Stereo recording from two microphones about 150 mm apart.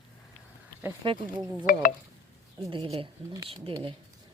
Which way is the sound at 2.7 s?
35° right (ahead or behind).